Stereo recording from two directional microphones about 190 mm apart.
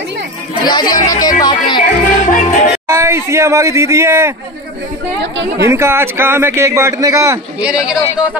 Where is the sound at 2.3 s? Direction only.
45° left (ahead or behind).